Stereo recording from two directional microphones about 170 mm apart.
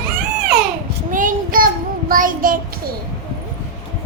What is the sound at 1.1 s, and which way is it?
Child singing, 50° right (ahead or behind).